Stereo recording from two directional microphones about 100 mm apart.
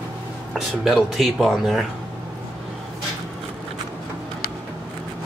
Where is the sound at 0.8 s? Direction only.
Centre (ahead or behind).